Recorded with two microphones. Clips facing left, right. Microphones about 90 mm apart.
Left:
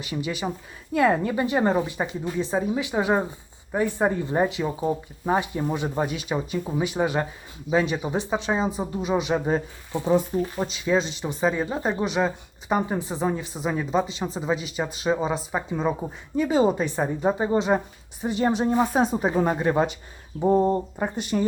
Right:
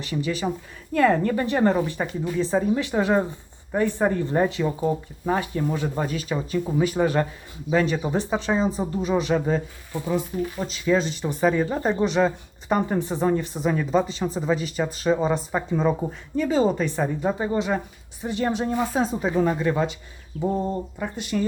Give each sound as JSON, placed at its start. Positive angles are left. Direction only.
{"t": 0.0, "sound": "speech", "side_deg": 15}
{"t": 9.9, "sound": "speech", "side_deg": 30}
{"t": 11.2, "sound": "speech", "side_deg": 0}
{"t": 17.2, "sound": "a woman's voice", "side_deg": 20}